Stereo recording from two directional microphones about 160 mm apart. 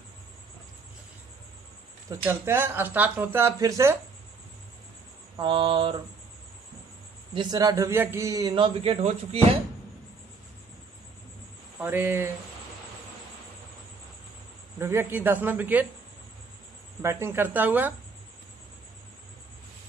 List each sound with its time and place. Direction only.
2.0 s speech: 15° right (ahead or behind)
5.4 s mantra: 30° right (ahead or behind)
7.3 s a man's voice: 25° right (ahead or behind)
11.8 s speech: 15° right (ahead or behind)
14.8 s speech: 15° right (ahead or behind)
17.0 s speech: 15° right (ahead or behind)